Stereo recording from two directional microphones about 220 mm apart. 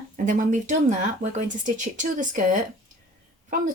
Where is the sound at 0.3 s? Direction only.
35° right (ahead or behind).